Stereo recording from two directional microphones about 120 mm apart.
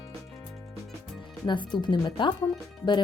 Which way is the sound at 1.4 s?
40° left (ahead or behind).